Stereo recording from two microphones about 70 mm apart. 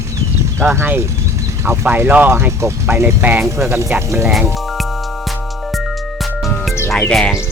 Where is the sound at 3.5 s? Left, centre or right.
Right.